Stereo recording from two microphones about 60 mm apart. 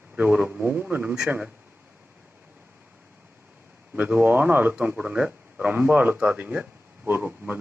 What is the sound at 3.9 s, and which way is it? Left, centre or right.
Speech, right.